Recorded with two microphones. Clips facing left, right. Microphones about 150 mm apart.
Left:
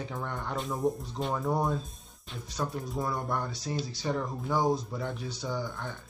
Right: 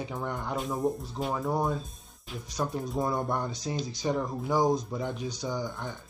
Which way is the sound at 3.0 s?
20° right (ahead or behind).